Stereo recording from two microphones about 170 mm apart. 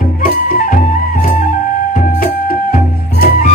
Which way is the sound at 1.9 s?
55° left (ahead or behind).